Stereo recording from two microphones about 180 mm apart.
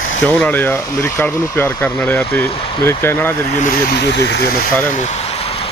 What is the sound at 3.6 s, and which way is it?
Speech, 50° left (ahead or behind).